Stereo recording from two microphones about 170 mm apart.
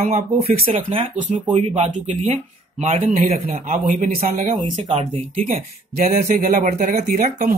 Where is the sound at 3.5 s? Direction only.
50° right (ahead or behind).